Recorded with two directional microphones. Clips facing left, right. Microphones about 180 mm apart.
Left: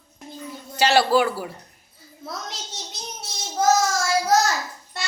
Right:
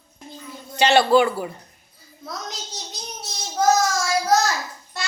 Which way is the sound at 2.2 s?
25° left (ahead or behind).